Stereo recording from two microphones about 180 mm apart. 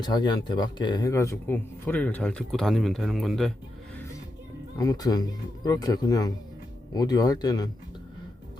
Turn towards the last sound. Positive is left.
turn(degrees=20)  # may be behind; listen again after turning